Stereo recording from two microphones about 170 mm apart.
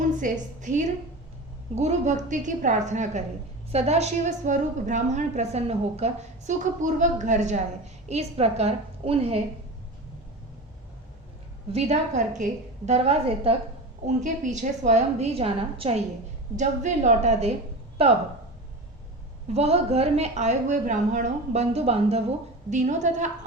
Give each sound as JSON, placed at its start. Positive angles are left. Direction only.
{"t": 0.2, "sound": "a woman's voice", "side_deg": -50}
{"t": 11.7, "sound": "speech", "side_deg": -40}
{"t": 14.2, "sound": "a woman's voice", "side_deg": -45}
{"t": 19.5, "sound": "a woman's voice", "side_deg": -40}